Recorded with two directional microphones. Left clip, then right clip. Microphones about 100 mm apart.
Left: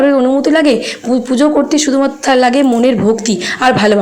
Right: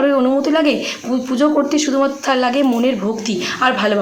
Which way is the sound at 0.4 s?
45° left (ahead or behind).